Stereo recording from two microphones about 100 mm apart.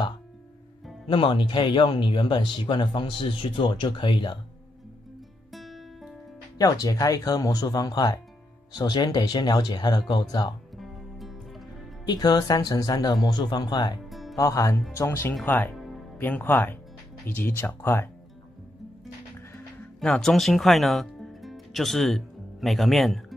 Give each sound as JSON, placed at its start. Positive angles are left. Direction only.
{"t": 1.0, "sound": "speech", "side_deg": 55}
{"t": 5.5, "sound": "music", "side_deg": 0}
{"t": 6.6, "sound": "speech", "side_deg": 35}
{"t": 10.8, "sound": "music", "side_deg": 0}
{"t": 12.1, "sound": "speech", "side_deg": 45}
{"t": 14.0, "sound": "music", "side_deg": 0}
{"t": 14.3, "sound": "speech", "side_deg": 35}
{"t": 15.7, "sound": "music", "side_deg": 0}
{"t": 16.2, "sound": "speech", "side_deg": 15}
{"t": 20.0, "sound": "speech", "side_deg": 5}